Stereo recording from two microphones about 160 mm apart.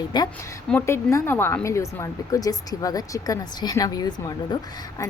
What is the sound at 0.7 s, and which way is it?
A woman's voice, 15° left (ahead or behind).